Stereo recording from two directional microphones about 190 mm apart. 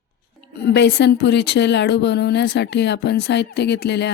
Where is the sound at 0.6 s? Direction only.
60° left (ahead or behind).